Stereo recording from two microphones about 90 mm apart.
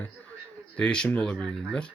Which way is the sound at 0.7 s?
10° left (ahead or behind).